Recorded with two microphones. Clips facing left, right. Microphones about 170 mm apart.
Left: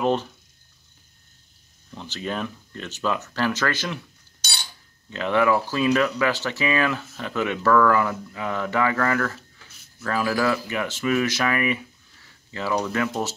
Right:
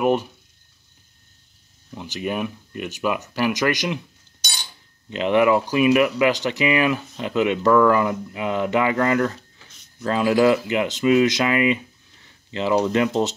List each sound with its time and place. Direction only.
0.0 s speech: 15° right (ahead or behind)
1.9 s speech: 10° right (ahead or behind)
5.1 s speech: 20° right (ahead or behind)